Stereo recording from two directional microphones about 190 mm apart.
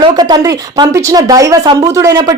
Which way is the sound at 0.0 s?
20° right (ahead or behind).